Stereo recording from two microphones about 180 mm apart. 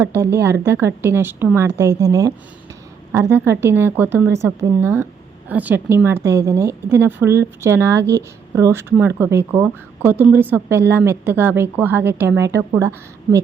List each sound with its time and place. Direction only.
0.0 s speech: 15° right (ahead or behind)